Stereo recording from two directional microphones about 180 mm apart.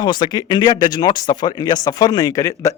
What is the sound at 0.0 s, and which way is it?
Speech, 25° left (ahead or behind).